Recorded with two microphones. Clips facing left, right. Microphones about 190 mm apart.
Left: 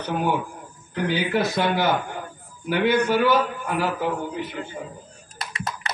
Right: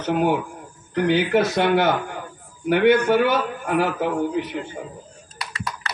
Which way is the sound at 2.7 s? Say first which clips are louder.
Right 4 dB; 60° right (ahead or behind).